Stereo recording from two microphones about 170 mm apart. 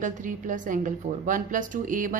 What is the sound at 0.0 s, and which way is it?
A woman's voice, 50° right (ahead or behind).